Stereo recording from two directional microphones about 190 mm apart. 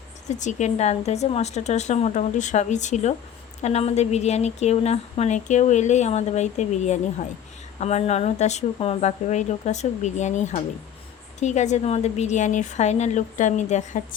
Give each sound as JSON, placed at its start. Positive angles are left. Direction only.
{"t": 0.3, "sound": "a woman's voice", "side_deg": 40}